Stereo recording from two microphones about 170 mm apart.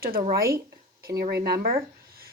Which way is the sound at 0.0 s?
60° right (ahead or behind).